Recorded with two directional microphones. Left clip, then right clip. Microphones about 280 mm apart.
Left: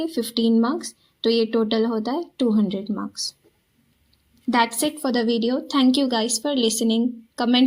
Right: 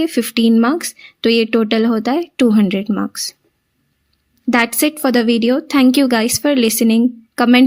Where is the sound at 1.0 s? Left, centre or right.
Right.